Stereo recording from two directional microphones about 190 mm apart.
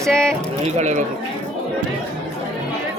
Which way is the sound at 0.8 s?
40° right (ahead or behind).